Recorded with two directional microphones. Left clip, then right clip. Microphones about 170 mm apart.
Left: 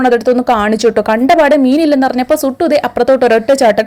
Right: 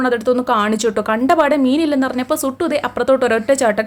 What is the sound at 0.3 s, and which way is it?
A woman's voice, 25° left (ahead or behind).